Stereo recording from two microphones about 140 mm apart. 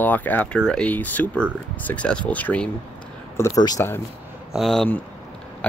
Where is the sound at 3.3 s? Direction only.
25° left (ahead or behind).